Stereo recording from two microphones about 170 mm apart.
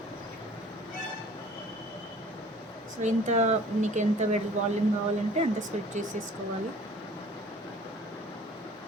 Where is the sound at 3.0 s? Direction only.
45° right (ahead or behind).